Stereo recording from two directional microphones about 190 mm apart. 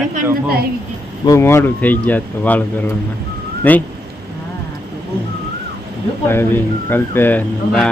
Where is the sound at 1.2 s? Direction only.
15° left (ahead or behind).